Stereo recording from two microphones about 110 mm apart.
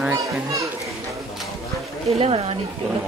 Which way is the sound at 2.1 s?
65° right (ahead or behind).